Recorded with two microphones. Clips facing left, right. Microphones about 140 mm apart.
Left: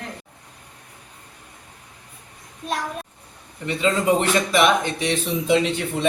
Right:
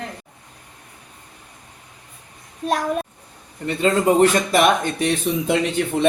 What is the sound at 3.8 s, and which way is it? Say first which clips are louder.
Speech: right 4 dB; 45° right (ahead or behind).